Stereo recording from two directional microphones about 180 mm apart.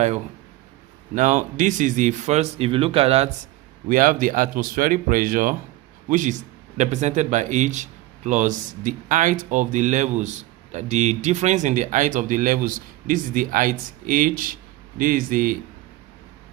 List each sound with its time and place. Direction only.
1.1 s speech: 45° right (ahead or behind)
3.8 s a man's voice: 50° right (ahead or behind)